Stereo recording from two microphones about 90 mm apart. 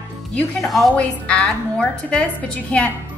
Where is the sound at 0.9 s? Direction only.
10° left (ahead or behind).